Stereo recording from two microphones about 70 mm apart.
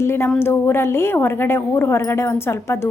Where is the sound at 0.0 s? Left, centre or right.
Left.